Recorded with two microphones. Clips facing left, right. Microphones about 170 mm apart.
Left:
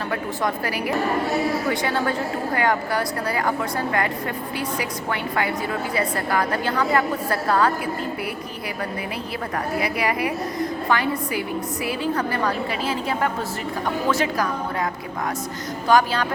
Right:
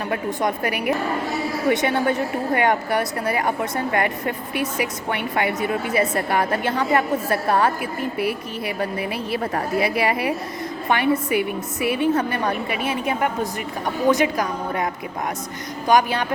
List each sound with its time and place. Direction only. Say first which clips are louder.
0.1 s a woman's voice: right 3 dB; 20° right (ahead or behind)
9.8 s a woman's voice: right 2 dB; 25° right (ahead or behind)
15.9 s a woman's voice: even; 20° right (ahead or behind)